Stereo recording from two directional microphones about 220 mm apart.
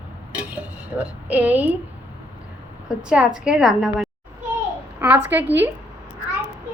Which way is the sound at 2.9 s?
5° right (ahead or behind).